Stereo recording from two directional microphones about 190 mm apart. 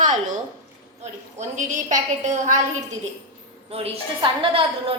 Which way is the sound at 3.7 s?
30° right (ahead or behind).